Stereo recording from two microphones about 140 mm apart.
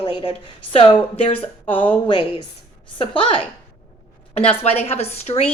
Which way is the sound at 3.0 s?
40° left (ahead or behind).